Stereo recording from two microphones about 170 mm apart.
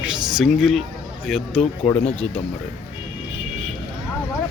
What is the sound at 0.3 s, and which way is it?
Speech, centre (ahead or behind).